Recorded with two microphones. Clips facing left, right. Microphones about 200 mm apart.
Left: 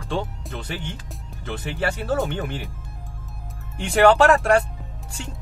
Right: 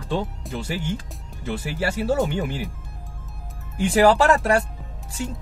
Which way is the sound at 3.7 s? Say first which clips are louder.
Even; centre (ahead or behind).